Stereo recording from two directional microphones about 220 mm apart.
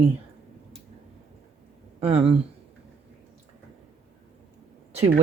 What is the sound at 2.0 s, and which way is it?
Speech, 25° right (ahead or behind).